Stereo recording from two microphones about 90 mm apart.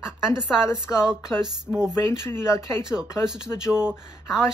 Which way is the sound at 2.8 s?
5° right (ahead or behind).